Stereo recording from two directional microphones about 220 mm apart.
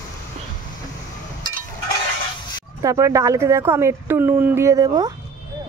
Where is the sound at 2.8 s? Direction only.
15° right (ahead or behind).